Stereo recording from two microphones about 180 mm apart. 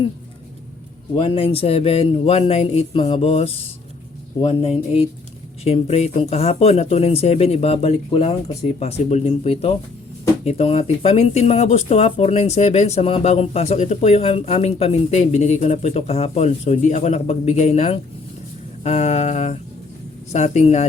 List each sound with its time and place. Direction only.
1.1 s speech: 30° left (ahead or behind)